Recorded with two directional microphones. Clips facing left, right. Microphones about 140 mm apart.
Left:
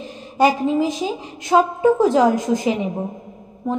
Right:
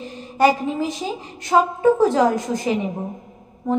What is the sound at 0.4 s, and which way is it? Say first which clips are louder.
A woman's voice: left 2 dB; 15° left (ahead or behind).